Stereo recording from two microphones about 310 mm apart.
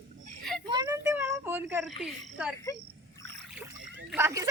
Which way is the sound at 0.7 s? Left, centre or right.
Centre.